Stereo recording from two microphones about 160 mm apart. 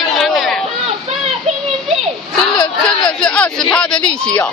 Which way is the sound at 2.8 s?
5° left (ahead or behind).